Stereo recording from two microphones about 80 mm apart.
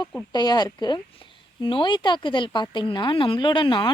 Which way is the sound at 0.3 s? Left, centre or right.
Left.